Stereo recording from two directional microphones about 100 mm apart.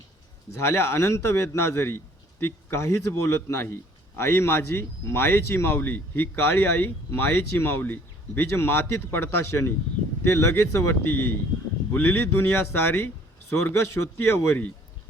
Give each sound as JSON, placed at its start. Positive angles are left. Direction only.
{"t": 0.5, "sound": "a man's voice", "side_deg": 30}